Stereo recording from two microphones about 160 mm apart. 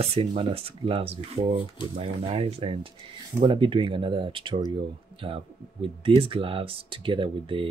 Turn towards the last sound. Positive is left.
turn(degrees=-30)  # may be behind; listen again after turning